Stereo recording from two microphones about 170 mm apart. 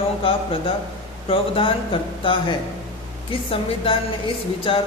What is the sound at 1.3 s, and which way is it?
Speech, 30° left (ahead or behind).